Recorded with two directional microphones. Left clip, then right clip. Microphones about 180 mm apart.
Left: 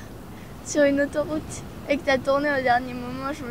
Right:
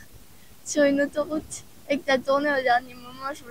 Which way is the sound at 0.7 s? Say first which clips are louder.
Left 1 dB; 30° right (ahead or behind).